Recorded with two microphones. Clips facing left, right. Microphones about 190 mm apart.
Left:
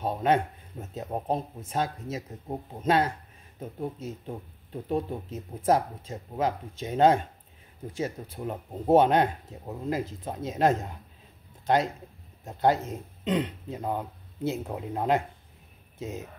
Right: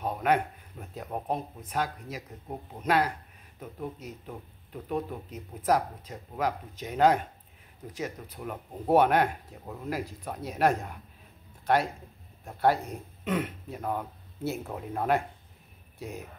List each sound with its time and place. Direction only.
0.0 s speech: 25° left (ahead or behind)